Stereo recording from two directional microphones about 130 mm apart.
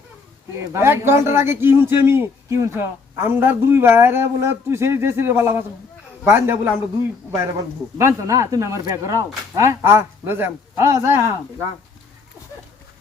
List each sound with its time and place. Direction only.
0.6 s a man's voice: 20° right (ahead or behind)
7.9 s a man's voice: 20° right (ahead or behind)